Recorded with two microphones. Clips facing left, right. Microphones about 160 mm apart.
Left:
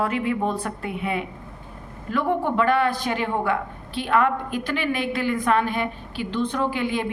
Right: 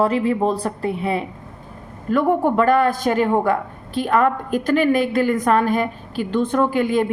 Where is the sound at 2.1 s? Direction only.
45° right (ahead or behind).